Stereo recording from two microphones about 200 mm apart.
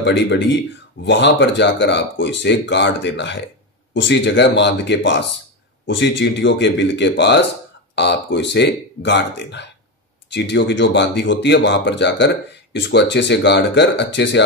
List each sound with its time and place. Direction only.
0.0 s speech: 60° left (ahead or behind)